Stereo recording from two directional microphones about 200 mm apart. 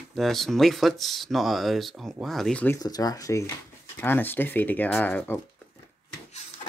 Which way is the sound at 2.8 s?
20° left (ahead or behind).